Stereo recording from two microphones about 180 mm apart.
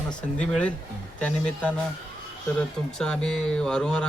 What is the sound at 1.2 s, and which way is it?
Speech, 5° left (ahead or behind).